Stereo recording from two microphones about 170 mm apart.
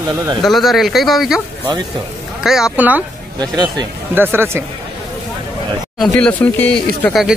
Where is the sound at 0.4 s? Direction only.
Centre (ahead or behind).